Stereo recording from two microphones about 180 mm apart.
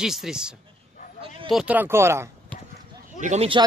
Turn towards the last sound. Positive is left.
turn(degrees=-40)  # may be behind; listen again after turning